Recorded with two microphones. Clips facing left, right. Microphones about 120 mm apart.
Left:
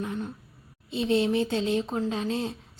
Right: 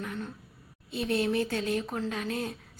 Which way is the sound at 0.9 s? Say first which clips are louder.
Left 4 dB; 25° left (ahead or behind).